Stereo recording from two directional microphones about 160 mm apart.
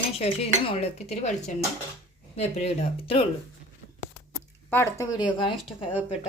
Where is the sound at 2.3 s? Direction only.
40° left (ahead or behind).